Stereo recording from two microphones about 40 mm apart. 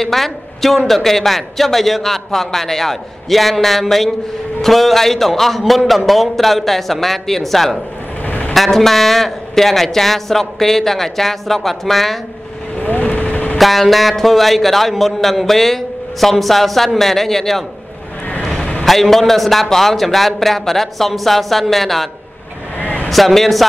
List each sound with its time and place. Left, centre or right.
0.0 s a man's voice: centre
8.3 s vehicle: left
8.5 s a man's voice: centre
12.8 s vehicle: left
13.6 s a man's voice: centre
18.4 s vehicle: centre
18.9 s a man's voice: centre
22.8 s vehicle: left
23.0 s a man's voice: centre